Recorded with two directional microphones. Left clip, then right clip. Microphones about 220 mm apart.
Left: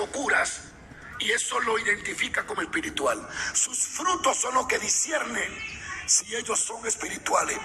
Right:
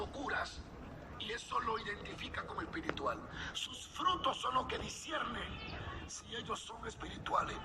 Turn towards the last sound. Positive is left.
turn(degrees=30)  # may be behind; listen again after turning